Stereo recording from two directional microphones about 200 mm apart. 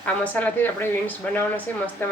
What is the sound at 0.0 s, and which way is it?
Speech, 10° left (ahead or behind).